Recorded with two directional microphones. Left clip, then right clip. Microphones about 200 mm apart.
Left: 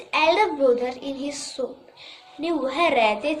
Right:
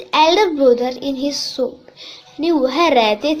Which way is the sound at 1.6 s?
35° right (ahead or behind).